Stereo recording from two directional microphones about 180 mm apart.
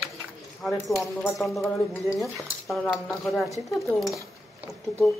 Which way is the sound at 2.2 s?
Centre (ahead or behind).